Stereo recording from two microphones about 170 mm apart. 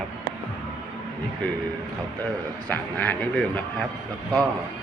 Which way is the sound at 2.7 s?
10° left (ahead or behind).